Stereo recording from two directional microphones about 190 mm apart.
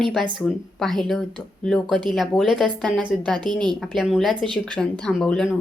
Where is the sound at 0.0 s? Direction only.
Centre (ahead or behind).